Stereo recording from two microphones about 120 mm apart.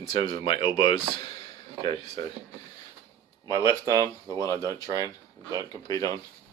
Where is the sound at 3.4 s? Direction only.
30° right (ahead or behind).